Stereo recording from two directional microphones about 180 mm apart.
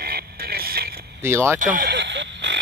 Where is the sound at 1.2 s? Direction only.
15° right (ahead or behind).